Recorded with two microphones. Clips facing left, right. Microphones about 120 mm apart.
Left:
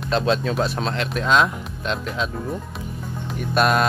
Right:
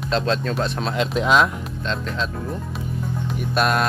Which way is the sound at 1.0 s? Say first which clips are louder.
Right 4 dB; 20° right (ahead or behind).